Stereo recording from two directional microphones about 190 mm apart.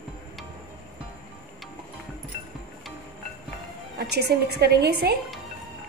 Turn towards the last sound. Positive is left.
turn(degrees=-60)  # may be behind; listen again after turning